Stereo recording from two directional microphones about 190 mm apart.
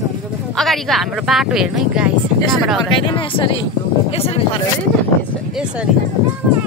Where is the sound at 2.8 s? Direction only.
25° left (ahead or behind).